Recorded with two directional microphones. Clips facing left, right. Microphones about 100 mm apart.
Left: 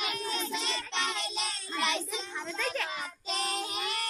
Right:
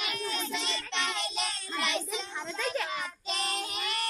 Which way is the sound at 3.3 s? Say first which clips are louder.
Left 2 dB; 35° left (ahead or behind).